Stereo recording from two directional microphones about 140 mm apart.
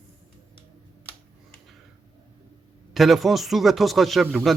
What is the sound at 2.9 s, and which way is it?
Speech, centre (ahead or behind).